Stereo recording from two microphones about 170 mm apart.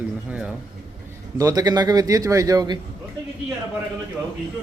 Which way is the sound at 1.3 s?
20° right (ahead or behind).